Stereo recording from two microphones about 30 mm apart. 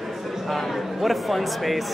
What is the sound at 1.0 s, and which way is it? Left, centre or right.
Speech, centre.